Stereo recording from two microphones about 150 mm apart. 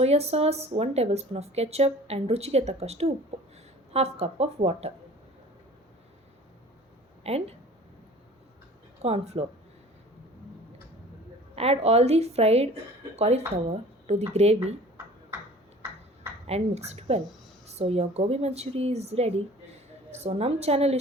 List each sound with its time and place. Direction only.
0.0 s speech: 45° right (ahead or behind)
7.3 s speech: 45° right (ahead or behind)
9.0 s speech: 45° right (ahead or behind)
11.5 s speech: 45° right (ahead or behind)
16.5 s speech: 45° right (ahead or behind)